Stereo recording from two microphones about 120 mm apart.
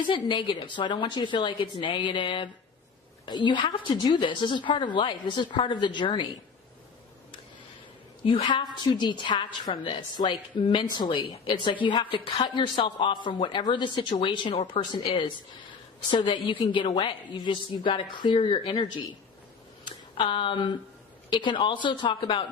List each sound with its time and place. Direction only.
0.1 s a woman's voice: 40° left (ahead or behind)
8.3 s a woman's voice: 40° left (ahead or behind)
16.0 s a woman's voice: 40° left (ahead or behind)
19.8 s a sound: 40° left (ahead or behind)
21.2 s a woman's voice: 40° left (ahead or behind)